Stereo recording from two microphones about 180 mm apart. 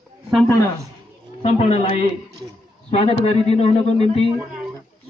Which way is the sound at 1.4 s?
35° left (ahead or behind).